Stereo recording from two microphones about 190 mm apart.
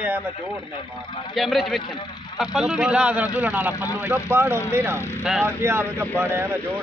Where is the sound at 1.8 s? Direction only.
25° left (ahead or behind).